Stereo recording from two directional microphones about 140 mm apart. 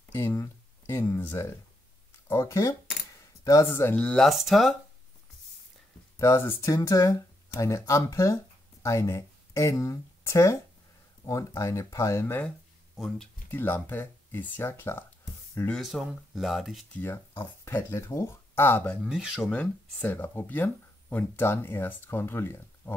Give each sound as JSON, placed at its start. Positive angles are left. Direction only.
{"t": 0.1, "sound": "a sound", "side_deg": 20}
{"t": 2.2, "sound": "speech", "side_deg": 20}
{"t": 6.1, "sound": "speech", "side_deg": 20}
{"t": 12.9, "sound": "speech", "side_deg": 0}
{"t": 13.5, "sound": "speech", "side_deg": 15}
{"t": 15.7, "sound": "speech", "side_deg": 0}
{"t": 16.9, "sound": "speech", "side_deg": 15}
{"t": 19.0, "sound": "speech", "side_deg": -5}
{"t": 19.5, "sound": "speech", "side_deg": 10}